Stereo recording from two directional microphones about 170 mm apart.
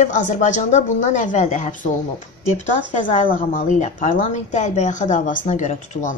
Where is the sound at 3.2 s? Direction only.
55° left (ahead or behind).